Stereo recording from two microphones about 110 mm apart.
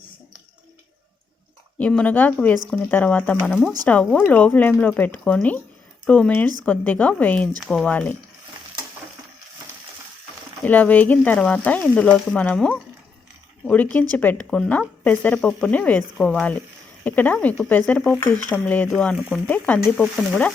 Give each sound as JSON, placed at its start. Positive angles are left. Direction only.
{"t": 1.8, "sound": "speech", "side_deg": 10}
{"t": 7.6, "sound": "speech", "side_deg": 0}
{"t": 7.9, "sound": "speech", "side_deg": 15}
{"t": 10.6, "sound": "speech", "side_deg": 15}